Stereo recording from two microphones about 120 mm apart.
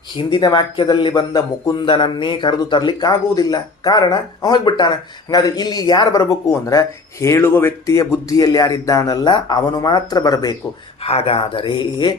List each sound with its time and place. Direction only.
0.2 s speech: 45° left (ahead or behind)
1.8 s speech: 45° left (ahead or behind)
11.0 s speech: 60° left (ahead or behind); by 12.1 s 40° left (ahead or behind)